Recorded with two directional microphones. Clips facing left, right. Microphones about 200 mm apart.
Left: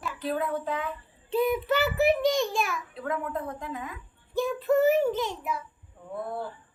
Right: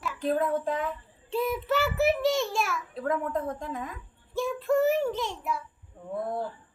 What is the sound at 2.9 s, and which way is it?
Speech, 45° right (ahead or behind).